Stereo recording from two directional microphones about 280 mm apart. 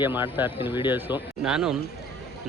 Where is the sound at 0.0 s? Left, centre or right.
Centre.